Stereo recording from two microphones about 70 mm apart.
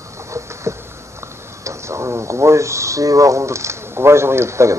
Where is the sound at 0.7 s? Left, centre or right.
Right.